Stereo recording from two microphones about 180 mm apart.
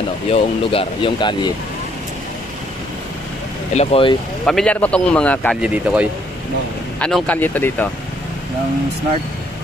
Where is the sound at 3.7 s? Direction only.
35° left (ahead or behind).